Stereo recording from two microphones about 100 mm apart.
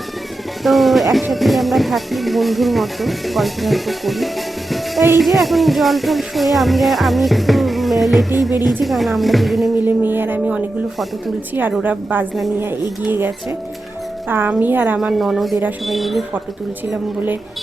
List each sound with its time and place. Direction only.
0.6 s speech: centre (ahead or behind)
9.8 s speech: 20° right (ahead or behind)
11.8 s a woman's voice: 15° right (ahead or behind)
14.9 s speech: 5° right (ahead or behind)